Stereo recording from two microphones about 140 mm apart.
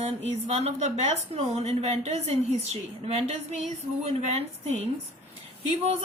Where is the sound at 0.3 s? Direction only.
50° right (ahead or behind).